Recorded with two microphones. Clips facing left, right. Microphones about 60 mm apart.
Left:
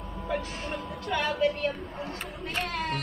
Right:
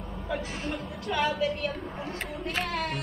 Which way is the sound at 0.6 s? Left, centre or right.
Centre.